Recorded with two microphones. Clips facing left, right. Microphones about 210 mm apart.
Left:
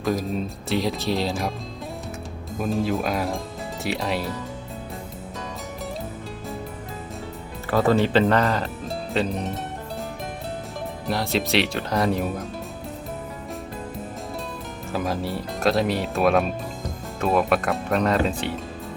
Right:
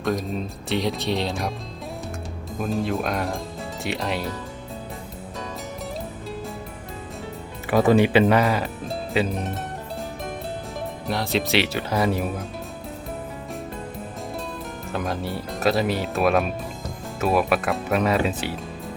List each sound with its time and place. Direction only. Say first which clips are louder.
0.0 s speech: left 1 dB; centre (ahead or behind)
2.6 s speech: left 1 dB; centre (ahead or behind)
7.7 s speech: right 2 dB; 15° right (ahead or behind)
11.0 s speech: even; centre (ahead or behind)
14.9 s speech: left 2 dB; centre (ahead or behind)